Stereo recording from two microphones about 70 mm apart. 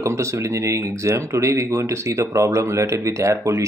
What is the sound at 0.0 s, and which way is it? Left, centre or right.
Speech, right.